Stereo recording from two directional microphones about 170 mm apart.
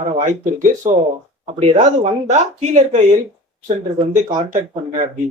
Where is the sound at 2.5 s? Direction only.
40° right (ahead or behind).